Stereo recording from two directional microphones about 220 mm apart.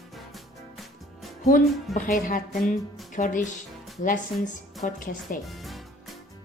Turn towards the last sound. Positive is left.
turn(degrees=0)  # may be behind; listen again after turning